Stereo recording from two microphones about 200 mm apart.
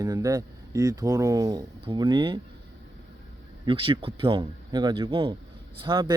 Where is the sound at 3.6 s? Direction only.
25° right (ahead or behind).